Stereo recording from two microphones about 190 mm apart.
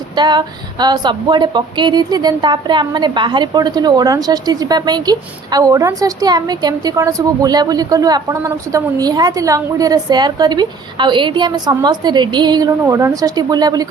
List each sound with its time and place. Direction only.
0.2 s a woman's voice: 25° right (ahead or behind)